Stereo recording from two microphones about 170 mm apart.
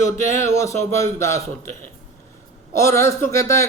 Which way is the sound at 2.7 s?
15° left (ahead or behind).